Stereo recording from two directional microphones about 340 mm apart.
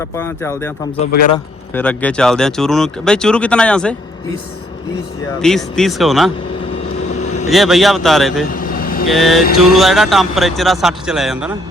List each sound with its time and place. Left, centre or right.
0.0 s speech: centre
1.7 s speech: centre
5.4 s speech: centre
7.1 s vehicle: left
7.5 s speech: centre
8.4 s vehicle: left
9.0 s speech: centre